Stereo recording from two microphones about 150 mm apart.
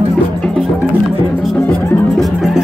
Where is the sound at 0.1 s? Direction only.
5° left (ahead or behind).